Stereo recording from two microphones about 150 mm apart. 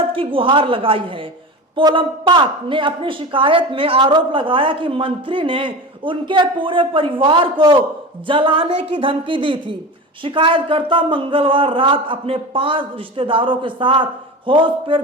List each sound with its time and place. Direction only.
0.1 s speech: 35° right (ahead or behind)